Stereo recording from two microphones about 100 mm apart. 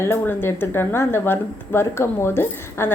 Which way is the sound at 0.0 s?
25° left (ahead or behind).